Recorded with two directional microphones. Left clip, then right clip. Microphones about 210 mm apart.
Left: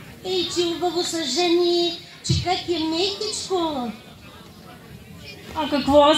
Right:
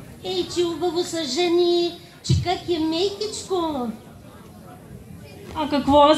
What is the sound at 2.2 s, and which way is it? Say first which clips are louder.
Speech: left 1 dB; 35° left (ahead or behind).